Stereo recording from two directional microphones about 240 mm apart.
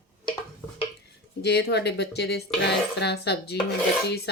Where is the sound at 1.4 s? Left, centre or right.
Left.